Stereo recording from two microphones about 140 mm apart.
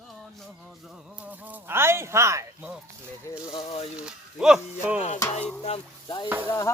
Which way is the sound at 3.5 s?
45° left (ahead or behind).